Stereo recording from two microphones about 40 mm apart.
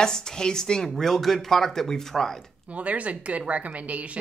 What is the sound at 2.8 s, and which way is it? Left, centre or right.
A woman's voice, right.